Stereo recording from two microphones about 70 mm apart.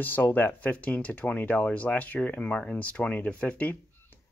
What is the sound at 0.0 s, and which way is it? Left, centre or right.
Speech, left.